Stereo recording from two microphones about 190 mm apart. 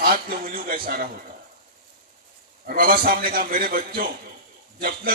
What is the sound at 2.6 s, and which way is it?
A man's voice, 50° right (ahead or behind).